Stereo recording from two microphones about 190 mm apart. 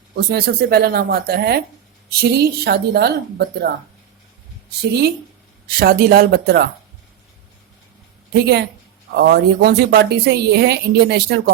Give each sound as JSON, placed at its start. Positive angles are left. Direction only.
{"t": 0.3, "sound": "a woman's voice", "side_deg": -55}
{"t": 4.8, "sound": "a woman's voice", "side_deg": -60}
{"t": 8.3, "sound": "a woman's voice", "side_deg": -60}